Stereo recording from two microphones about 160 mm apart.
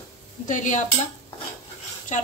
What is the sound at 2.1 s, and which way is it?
Speech, 50° left (ahead or behind).